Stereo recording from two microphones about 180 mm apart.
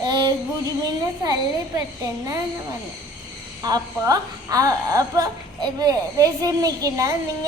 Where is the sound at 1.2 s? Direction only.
20° right (ahead or behind).